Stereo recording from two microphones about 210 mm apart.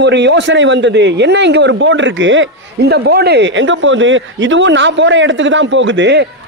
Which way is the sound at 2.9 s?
50° right (ahead or behind).